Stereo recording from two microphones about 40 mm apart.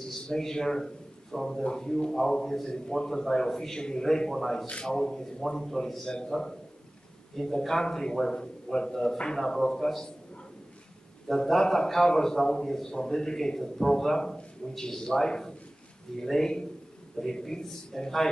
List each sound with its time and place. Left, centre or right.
0.3 s a man's voice: centre
6.0 s a man's voice: centre
7.3 s a man's voice: centre
11.3 s a man's voice: centre